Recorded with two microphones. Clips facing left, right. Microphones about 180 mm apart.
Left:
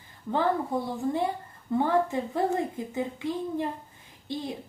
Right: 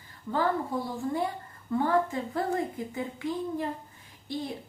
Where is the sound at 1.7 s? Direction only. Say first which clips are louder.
Left 2 dB; 20° left (ahead or behind).